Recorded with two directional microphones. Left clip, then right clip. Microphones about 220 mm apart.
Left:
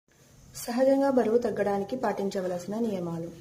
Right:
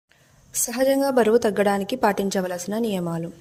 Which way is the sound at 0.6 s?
40° right (ahead or behind).